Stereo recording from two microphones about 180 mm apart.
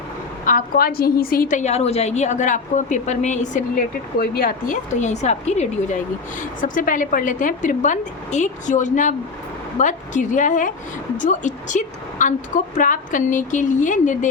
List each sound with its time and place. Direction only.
0.4 s a woman's voice: 50° left (ahead or behind)